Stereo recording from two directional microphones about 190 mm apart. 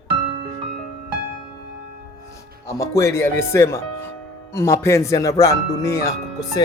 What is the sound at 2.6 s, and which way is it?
Speech, 15° left (ahead or behind).